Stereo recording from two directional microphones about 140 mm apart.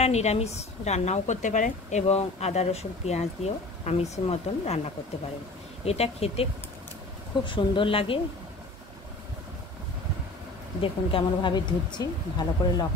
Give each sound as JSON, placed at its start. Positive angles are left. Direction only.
{"t": 0.0, "sound": "speech", "side_deg": 50}
{"t": 5.9, "sound": "speech", "side_deg": 45}
{"t": 10.8, "sound": "speech", "side_deg": 40}